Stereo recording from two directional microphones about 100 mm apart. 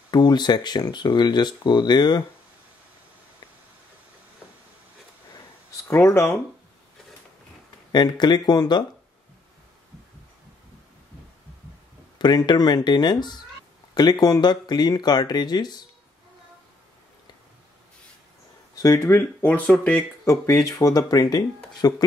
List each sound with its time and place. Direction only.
0.1 s speech: 45° left (ahead or behind)
5.9 s speech: 25° left (ahead or behind)
7.9 s speech: 45° left (ahead or behind)
12.2 s speech: 45° left (ahead or behind)
18.8 s speech: 30° left (ahead or behind)
19.4 s speech: 15° left (ahead or behind)
20.2 s speech: 30° left (ahead or behind)